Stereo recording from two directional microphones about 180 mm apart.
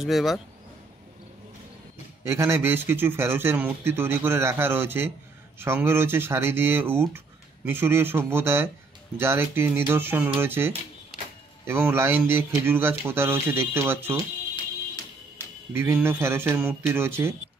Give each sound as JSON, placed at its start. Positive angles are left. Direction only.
{"t": 0.0, "sound": "speech", "side_deg": 0}
{"t": 2.2, "sound": "speech", "side_deg": -15}
{"t": 14.5, "sound": "music", "side_deg": 20}
{"t": 15.7, "sound": "speech", "side_deg": -15}